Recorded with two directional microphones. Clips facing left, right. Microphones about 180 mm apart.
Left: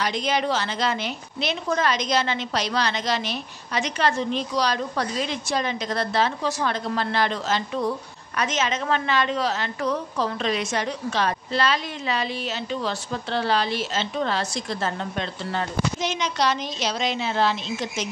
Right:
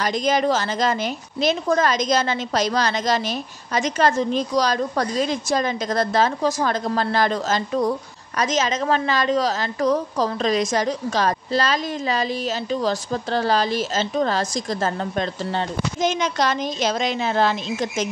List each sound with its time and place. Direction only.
0.0 s a woman's voice: 45° right (ahead or behind)